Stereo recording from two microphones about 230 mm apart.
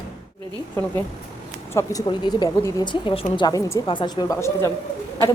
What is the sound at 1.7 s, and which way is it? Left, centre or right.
Speech, centre.